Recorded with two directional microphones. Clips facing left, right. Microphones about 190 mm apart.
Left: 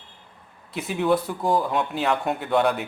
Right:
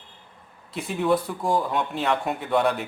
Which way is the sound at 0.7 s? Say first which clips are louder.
Left 1 dB; centre (ahead or behind).